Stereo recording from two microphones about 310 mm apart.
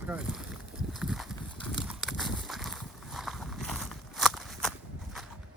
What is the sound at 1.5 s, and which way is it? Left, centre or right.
Clip-clop, centre.